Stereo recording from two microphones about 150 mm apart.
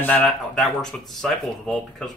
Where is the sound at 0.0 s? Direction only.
10° left (ahead or behind).